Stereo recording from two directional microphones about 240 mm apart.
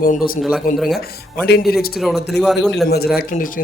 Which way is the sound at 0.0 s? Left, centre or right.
Left.